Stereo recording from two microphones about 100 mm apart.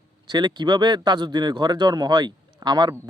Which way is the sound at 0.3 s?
45° right (ahead or behind).